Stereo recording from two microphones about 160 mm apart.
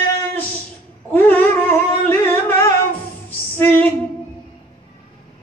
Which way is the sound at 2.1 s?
15° left (ahead or behind).